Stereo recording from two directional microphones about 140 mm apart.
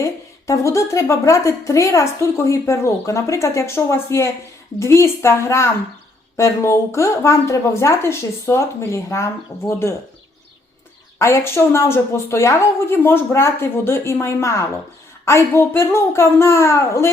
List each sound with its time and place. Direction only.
0.0 s a woman's voice: 20° left (ahead or behind)
11.2 s a woman's voice: 20° left (ahead or behind)